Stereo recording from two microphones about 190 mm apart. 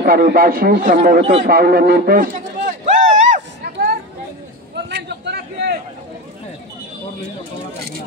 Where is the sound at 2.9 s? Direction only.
40° right (ahead or behind).